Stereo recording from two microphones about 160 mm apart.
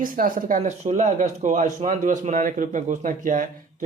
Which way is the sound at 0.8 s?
45° right (ahead or behind).